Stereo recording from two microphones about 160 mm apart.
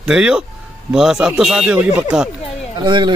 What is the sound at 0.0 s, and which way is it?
Speech, 5° right (ahead or behind).